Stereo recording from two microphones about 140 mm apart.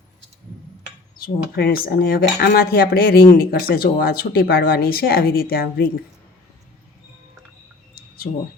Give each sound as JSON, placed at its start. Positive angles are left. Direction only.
{"t": 1.2, "sound": "cutlery", "side_deg": 90}